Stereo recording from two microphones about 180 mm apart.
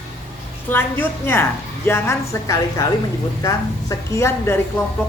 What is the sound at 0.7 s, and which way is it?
A woman's voice, 10° left (ahead or behind).